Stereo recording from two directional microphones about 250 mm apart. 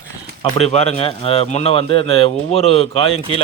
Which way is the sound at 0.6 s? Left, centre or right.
Left.